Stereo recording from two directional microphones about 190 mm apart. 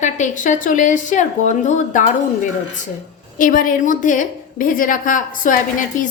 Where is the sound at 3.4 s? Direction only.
45° left (ahead or behind).